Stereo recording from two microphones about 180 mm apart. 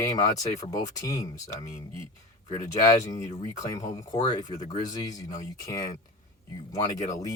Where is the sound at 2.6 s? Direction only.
20° left (ahead or behind).